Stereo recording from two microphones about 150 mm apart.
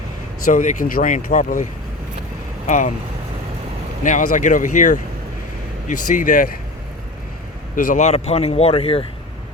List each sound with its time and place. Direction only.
0.4 s speech: 60° left (ahead or behind)
2.6 s speech: 55° left (ahead or behind)
4.0 s speech: 60° left (ahead or behind)
7.9 s a man's voice: 45° left (ahead or behind)